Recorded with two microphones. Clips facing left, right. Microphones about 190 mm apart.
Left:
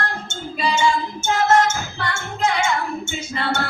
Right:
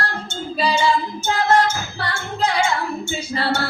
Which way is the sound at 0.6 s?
35° right (ahead or behind).